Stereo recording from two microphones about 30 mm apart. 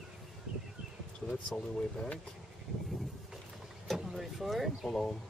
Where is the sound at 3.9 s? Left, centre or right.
Centre.